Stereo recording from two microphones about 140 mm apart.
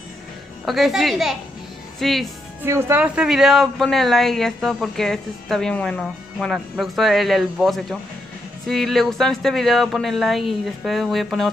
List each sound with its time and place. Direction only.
0.7 s speech: centre (ahead or behind)
2.6 s speech: 15° right (ahead or behind)
3.2 s speech: 5° right (ahead or behind)